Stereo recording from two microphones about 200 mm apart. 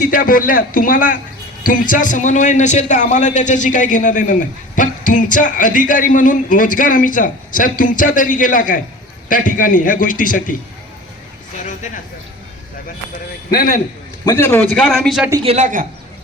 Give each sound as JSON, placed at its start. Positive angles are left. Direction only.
{"t": 0.0, "sound": "a man's voice", "side_deg": 45}
{"t": 13.5, "sound": "a man's voice", "side_deg": 45}
{"t": 14.3, "sound": "a man's voice", "side_deg": 10}
{"t": 15.4, "sound": "a man's voice", "side_deg": -35}